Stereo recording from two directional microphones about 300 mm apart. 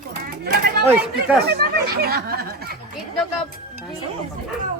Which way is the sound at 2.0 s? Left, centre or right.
Right.